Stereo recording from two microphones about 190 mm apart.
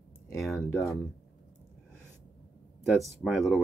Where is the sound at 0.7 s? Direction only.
15° left (ahead or behind).